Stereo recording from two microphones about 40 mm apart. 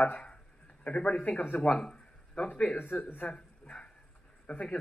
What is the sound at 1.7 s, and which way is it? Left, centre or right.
Speech, left.